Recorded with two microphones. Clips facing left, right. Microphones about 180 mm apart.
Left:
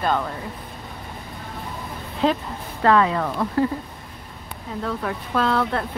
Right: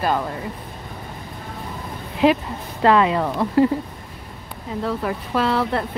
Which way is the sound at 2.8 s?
15° right (ahead or behind).